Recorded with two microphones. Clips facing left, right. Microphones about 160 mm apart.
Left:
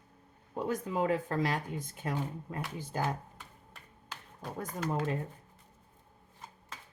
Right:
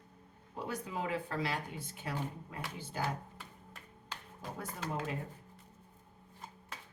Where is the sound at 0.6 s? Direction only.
45° left (ahead or behind).